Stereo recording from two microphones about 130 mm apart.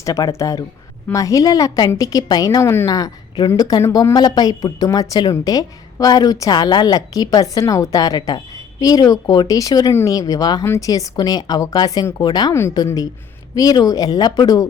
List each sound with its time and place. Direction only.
0.0 s a woman's voice: 25° left (ahead or behind)